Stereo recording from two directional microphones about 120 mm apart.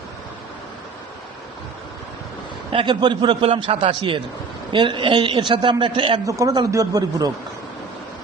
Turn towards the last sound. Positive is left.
turn(degrees=-30)  # may be behind; listen again after turning